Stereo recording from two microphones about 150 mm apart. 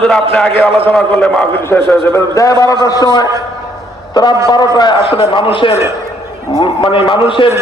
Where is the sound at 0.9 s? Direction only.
Centre (ahead or behind).